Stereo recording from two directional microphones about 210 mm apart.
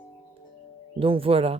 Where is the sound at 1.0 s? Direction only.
25° right (ahead or behind).